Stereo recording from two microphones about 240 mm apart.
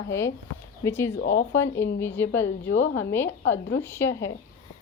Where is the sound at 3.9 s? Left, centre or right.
Centre.